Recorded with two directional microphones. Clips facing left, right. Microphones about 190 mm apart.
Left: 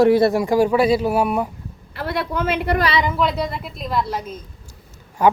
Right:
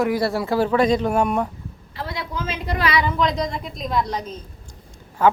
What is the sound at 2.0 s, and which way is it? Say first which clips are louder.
Speech: left 6 dB; 65° left (ahead or behind).